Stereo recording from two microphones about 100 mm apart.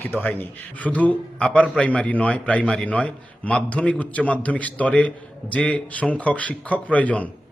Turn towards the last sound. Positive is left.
turn(degrees=15)  # may be behind; listen again after turning